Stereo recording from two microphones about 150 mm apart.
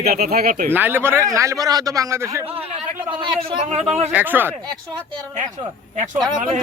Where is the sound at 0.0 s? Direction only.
90° right.